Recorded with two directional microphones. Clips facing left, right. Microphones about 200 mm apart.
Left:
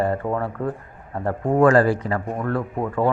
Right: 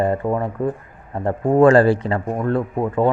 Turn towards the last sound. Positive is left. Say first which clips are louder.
# right 3 dB
turn(degrees=-20)  # may be behind; listen again after turning